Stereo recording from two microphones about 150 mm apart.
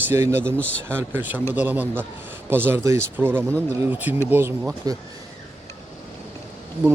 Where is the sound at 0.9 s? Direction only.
15° right (ahead or behind).